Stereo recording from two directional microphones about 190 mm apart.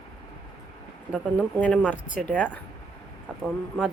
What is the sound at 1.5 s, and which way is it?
Speech, 5° left (ahead or behind).